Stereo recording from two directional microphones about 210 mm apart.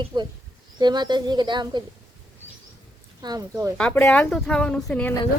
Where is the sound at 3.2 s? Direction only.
20° right (ahead or behind).